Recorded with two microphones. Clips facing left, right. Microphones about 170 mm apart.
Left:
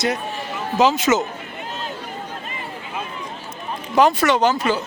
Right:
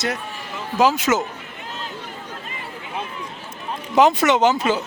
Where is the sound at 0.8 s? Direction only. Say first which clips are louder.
Left 1 dB; 10° right (ahead or behind).